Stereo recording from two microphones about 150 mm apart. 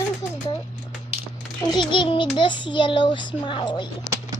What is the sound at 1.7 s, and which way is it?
A child's voice, 30° left (ahead or behind).